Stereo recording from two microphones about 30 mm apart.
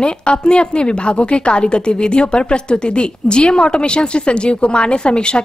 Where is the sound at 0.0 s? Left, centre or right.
Left.